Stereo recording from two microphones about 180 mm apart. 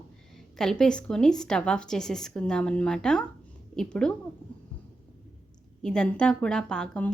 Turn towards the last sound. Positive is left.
turn(degrees=5)  # may be behind; listen again after turning